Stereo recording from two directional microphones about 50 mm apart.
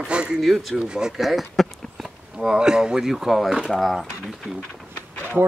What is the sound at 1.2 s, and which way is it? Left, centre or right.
Speech, centre.